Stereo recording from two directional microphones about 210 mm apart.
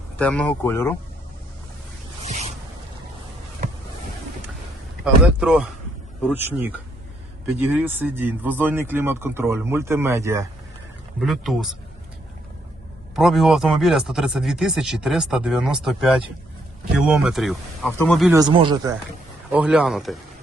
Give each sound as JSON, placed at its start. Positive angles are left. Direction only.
{"t": 0.2, "sound": "speech", "side_deg": 5}
{"t": 2.2, "sound": "a sound", "side_deg": -30}
{"t": 5.2, "sound": "speech", "side_deg": -5}
{"t": 11.2, "sound": "speech", "side_deg": 0}
{"t": 13.1, "sound": "speech", "side_deg": 0}
{"t": 18.3, "sound": "speech", "side_deg": -20}
{"t": 19.5, "sound": "speech", "side_deg": -5}